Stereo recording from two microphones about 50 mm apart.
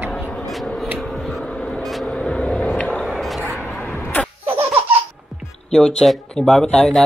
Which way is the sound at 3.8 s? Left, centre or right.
Left.